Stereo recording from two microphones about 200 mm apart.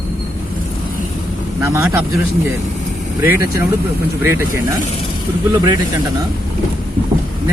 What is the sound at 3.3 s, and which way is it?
Speech, 10° right (ahead or behind).